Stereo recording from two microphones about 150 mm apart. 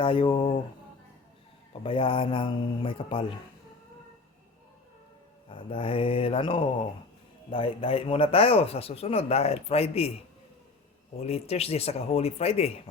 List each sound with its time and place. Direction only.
0.0 s speech: 35° left (ahead or behind)
1.8 s speech: 35° left (ahead or behind)
5.5 s speech: 35° left (ahead or behind)
11.2 s speech: 40° left (ahead or behind)